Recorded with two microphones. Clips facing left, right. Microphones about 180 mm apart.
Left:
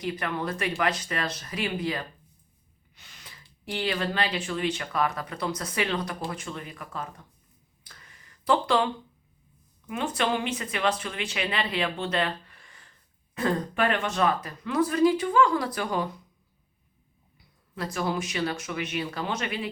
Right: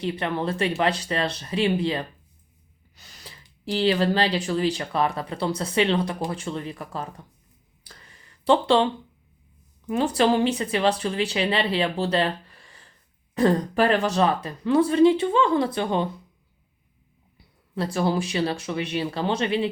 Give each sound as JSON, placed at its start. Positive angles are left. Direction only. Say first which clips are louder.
{"t": 0.0, "sound": "speech", "louder": "right 4 dB", "side_deg": -25}
{"t": 2.9, "sound": "gasp", "louder": "right 5 dB", "side_deg": -40}
{"t": 3.6, "sound": "speech", "louder": "right 8 dB", "side_deg": -30}
{"t": 7.9, "sound": "a sound", "louder": "right 4 dB", "side_deg": -30}
{"t": 9.8, "sound": "speech", "louder": "right 7 dB", "side_deg": -35}
{"t": 17.7, "sound": "speech", "louder": "right 5 dB", "side_deg": -30}